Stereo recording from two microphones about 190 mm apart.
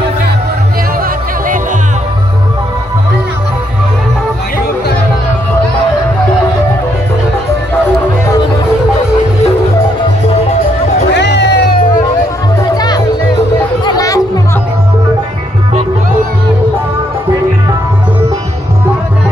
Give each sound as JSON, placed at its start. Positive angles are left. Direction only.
{"t": 11.1, "sound": "music", "side_deg": 65}
{"t": 12.7, "sound": "music", "side_deg": 20}